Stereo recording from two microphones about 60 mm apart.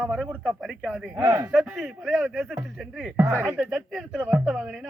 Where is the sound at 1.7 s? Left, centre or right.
Centre.